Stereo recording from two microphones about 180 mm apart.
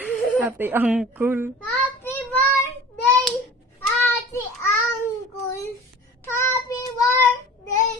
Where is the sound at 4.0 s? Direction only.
10° left (ahead or behind).